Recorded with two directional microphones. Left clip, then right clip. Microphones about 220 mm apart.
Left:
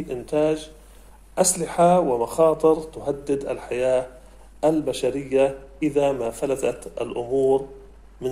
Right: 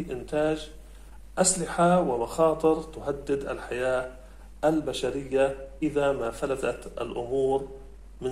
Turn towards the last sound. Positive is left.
turn(degrees=30)  # may be behind; listen again after turning